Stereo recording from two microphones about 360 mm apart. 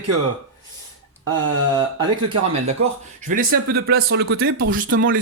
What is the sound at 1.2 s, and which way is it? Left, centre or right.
Speech, right.